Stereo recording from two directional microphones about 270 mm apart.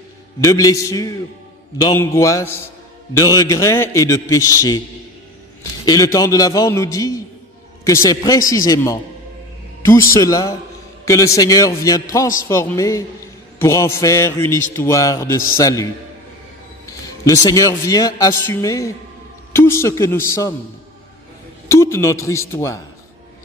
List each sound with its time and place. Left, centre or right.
0.4 s a man's voice: centre
21.6 s a man's voice: centre